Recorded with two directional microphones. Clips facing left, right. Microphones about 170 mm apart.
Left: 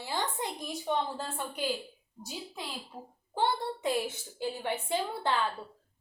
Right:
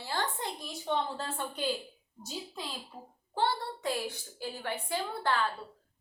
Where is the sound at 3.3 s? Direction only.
20° left (ahead or behind).